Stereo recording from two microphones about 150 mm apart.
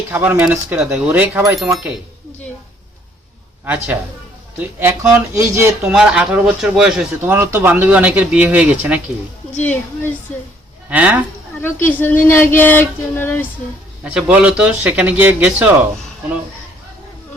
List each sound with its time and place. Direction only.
0.1 s speech: 10° right (ahead or behind)
1.5 s speech: 5° right (ahead or behind)
4.8 s speech: 15° right (ahead or behind)
5.8 s speech: 5° right (ahead or behind)
7.2 s speech: 15° right (ahead or behind)
9.6 s speech: 10° left (ahead or behind)
10.8 s speech: 10° right (ahead or behind)
11.6 s speech: 15° left (ahead or behind)
14.0 s speech: 10° right (ahead or behind)